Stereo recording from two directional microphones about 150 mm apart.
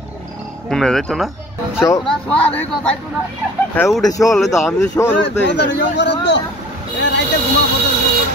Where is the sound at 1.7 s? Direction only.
20° left (ahead or behind).